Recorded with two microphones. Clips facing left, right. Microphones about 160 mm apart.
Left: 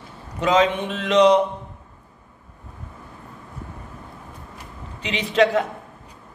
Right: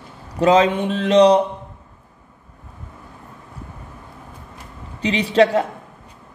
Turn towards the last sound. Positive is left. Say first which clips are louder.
# right 3 dB
turn(degrees=-30)  # may be behind; listen again after turning